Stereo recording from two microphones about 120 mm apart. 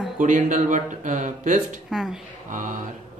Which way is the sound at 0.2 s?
90° right.